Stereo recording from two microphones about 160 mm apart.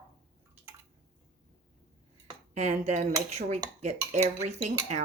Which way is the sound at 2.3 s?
45° right (ahead or behind).